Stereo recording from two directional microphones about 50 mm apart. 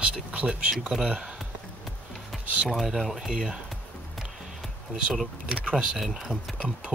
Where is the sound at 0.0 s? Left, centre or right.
Right.